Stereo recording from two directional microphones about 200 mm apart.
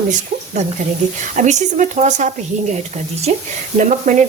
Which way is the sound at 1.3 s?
40° right (ahead or behind).